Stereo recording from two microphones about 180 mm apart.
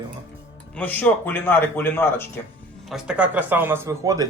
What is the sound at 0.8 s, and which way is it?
Speech, 10° left (ahead or behind).